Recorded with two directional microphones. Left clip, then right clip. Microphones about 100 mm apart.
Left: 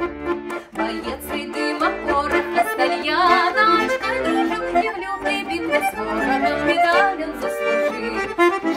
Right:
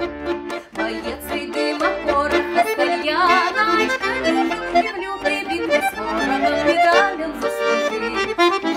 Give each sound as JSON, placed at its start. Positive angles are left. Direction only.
{"t": 1.6, "sound": "music", "side_deg": -5}
{"t": 2.1, "sound": "accordion", "side_deg": 0}
{"t": 4.3, "sound": "music", "side_deg": 0}
{"t": 6.2, "sound": "accordion", "side_deg": 0}
{"t": 6.6, "sound": "music", "side_deg": -5}
{"t": 7.7, "sound": "accordion", "side_deg": -30}